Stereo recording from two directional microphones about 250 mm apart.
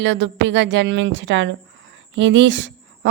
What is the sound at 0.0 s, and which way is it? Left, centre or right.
Speech, right.